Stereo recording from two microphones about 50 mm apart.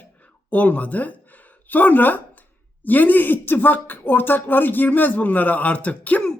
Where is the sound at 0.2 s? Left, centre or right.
Left.